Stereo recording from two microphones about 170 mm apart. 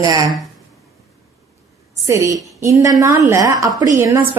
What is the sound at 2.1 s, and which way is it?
A woman's voice, 20° right (ahead or behind).